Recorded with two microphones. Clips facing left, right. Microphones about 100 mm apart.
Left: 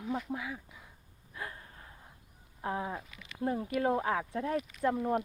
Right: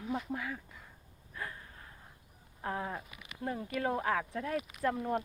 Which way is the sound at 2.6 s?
20° left (ahead or behind).